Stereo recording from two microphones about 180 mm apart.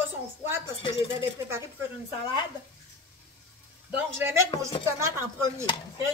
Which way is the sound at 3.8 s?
15° right (ahead or behind).